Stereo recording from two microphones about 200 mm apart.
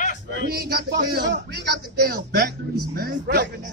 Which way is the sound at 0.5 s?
50° right (ahead or behind).